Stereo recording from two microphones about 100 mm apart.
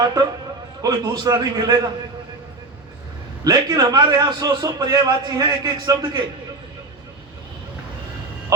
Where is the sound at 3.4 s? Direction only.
40° right (ahead or behind).